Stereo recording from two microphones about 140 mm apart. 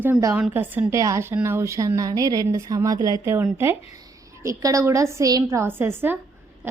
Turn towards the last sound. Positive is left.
turn(degrees=-15)  # may be behind; listen again after turning